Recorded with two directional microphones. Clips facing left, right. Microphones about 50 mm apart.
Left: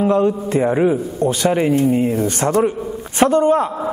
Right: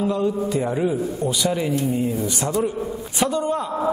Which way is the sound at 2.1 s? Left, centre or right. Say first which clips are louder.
Left 6 dB; left.